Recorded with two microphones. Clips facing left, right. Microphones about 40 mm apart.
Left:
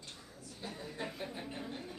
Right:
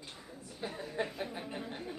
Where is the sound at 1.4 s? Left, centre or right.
Centre.